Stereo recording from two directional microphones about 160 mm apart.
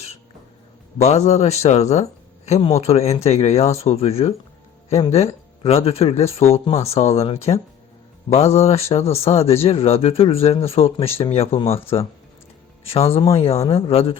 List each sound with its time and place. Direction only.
1.0 s speech: 45° left (ahead or behind)